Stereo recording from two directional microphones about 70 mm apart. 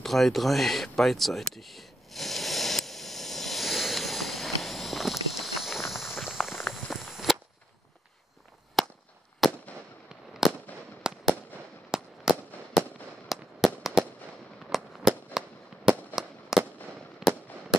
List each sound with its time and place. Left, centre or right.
0.0 s a sound: centre
8.8 s firecracker: centre
9.4 s fireworks: centre
13.3 s fireworks: centre
14.7 s fireworks: centre